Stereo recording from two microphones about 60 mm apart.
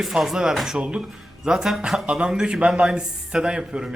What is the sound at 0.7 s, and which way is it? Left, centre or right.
A man's voice, centre.